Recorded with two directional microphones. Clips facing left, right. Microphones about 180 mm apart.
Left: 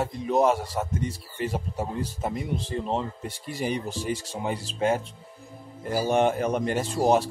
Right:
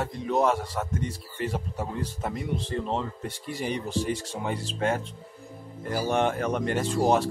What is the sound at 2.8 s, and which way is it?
Speech, 5° left (ahead or behind).